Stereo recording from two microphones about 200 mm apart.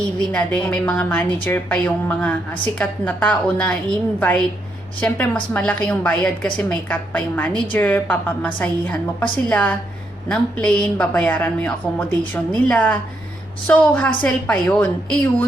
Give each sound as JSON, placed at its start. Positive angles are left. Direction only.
{"t": 0.2, "sound": "a woman's voice", "side_deg": 5}